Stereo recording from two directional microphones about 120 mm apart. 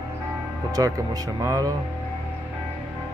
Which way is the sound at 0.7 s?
30° right (ahead or behind).